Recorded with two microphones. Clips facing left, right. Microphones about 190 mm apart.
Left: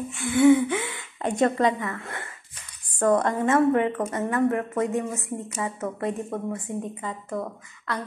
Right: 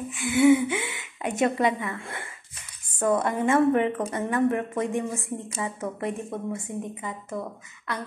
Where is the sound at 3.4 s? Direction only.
25° right (ahead or behind).